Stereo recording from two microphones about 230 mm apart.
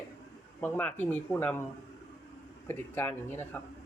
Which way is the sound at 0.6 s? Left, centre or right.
Centre.